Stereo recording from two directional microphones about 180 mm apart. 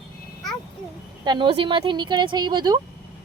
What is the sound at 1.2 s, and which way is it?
Speech, 25° right (ahead or behind).